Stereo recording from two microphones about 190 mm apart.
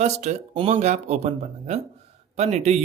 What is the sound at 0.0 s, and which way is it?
A man's voice, 35° right (ahead or behind).